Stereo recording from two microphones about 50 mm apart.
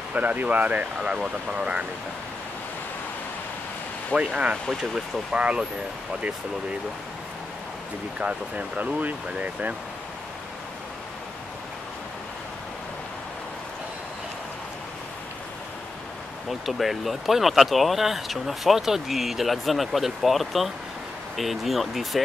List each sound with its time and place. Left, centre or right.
0.1 s speech: right
4.1 s speech: right
8.2 s speech: right
16.4 s speech: centre